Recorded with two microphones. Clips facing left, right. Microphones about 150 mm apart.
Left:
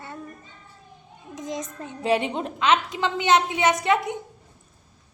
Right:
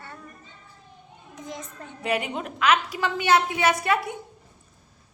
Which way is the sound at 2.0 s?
30° left (ahead or behind).